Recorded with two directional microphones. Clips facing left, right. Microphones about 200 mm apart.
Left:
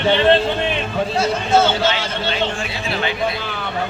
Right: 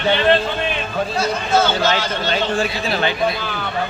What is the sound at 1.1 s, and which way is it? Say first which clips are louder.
Speech: left 2 dB; 25° left (ahead or behind).